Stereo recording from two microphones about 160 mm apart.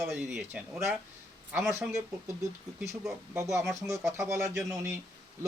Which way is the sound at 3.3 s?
20° right (ahead or behind).